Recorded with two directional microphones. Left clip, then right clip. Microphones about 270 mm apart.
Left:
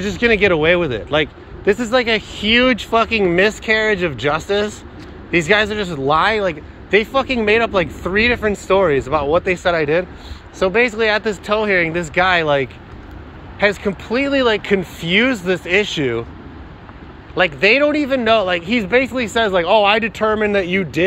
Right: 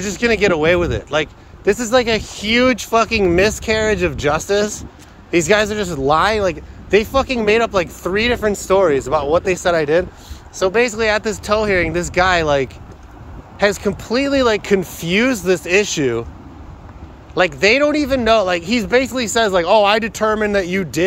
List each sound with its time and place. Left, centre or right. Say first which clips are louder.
0.0 s speech: left 1 dB; centre
17.4 s speech: even; right